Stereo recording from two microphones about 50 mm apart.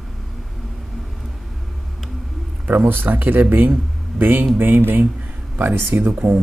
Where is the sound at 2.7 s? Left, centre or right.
Right.